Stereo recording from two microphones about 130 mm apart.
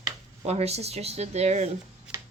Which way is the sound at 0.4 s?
55° right (ahead or behind).